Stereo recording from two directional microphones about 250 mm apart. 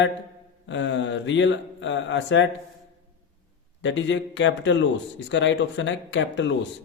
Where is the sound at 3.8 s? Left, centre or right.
Left.